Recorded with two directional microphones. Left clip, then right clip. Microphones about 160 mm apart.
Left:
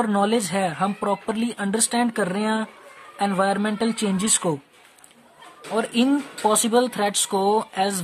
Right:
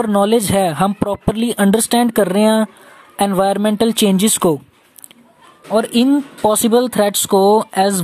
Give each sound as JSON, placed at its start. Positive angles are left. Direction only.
{"t": 0.0, "sound": "speech", "side_deg": -45}
{"t": 5.7, "sound": "speech", "side_deg": -35}